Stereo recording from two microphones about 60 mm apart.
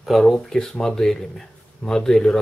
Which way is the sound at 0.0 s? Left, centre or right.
Centre.